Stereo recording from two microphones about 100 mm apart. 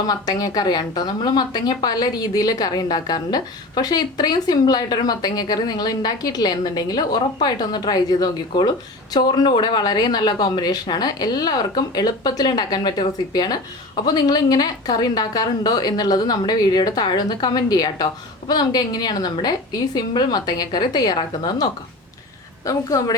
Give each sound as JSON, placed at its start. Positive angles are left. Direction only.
{"t": 0.1, "sound": "a woman's voice", "side_deg": 40}